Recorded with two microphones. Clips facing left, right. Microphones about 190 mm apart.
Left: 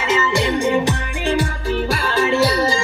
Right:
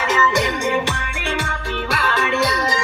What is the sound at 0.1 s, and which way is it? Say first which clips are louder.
Music: left 2 dB; 25° left (ahead or behind).